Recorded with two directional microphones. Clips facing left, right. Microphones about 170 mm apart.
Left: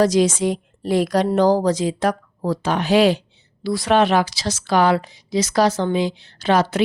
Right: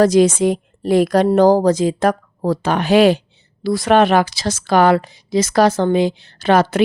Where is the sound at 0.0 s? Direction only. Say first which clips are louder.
Right 4 dB; 55° right (ahead or behind).